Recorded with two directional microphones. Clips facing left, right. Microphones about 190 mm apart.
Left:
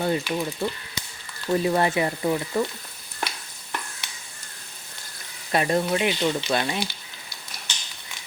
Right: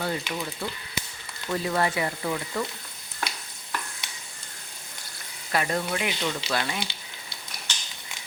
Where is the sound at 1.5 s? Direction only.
20° left (ahead or behind).